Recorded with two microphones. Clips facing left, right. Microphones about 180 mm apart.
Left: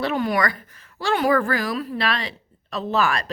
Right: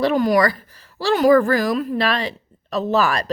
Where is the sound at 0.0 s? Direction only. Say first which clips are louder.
Right 6 dB; 40° right (ahead or behind).